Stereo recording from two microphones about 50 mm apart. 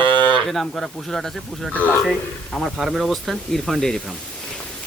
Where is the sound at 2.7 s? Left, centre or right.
Centre.